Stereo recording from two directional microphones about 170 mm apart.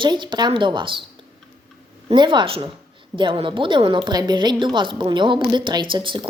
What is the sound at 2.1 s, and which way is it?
A woman's voice, 25° right (ahead or behind).